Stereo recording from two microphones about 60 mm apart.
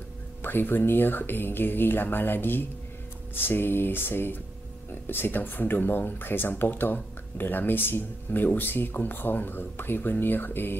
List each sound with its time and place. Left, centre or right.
0.4 s speech: left